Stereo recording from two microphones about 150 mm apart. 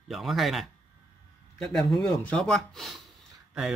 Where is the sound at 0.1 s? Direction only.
Centre (ahead or behind).